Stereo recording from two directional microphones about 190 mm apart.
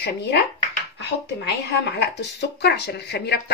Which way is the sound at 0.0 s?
60° left (ahead or behind).